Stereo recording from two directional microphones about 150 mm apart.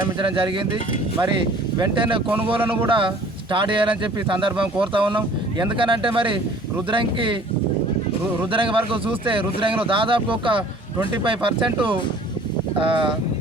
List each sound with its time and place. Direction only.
0.2 s speech: 35° right (ahead or behind)
1.8 s speech: 35° right (ahead or behind)
2.6 s speech: 15° right (ahead or behind)
3.5 s speech: 35° right (ahead or behind)
8.5 s speech: 35° right (ahead or behind)